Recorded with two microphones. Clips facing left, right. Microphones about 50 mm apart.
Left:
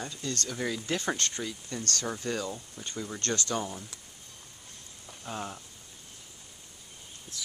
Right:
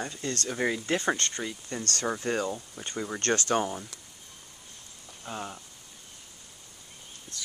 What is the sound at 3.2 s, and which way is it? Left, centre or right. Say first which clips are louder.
Speech: right 6 dB; right.